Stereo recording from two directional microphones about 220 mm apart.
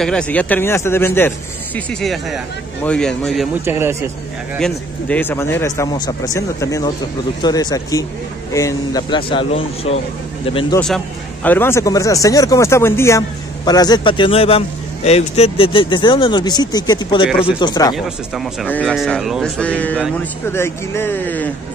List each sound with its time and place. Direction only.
0.0 s a man's voice: 5° left (ahead or behind)
3.6 s a man's voice: 10° right (ahead or behind)
4.6 s a man's voice: 5° left (ahead or behind); by 10.8 s 25° left (ahead or behind)
11.4 s a man's voice: 10° left (ahead or behind)
17.9 s a man's voice: centre (ahead or behind)